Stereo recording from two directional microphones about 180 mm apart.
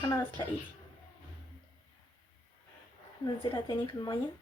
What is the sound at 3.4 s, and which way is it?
Speech, 25° left (ahead or behind).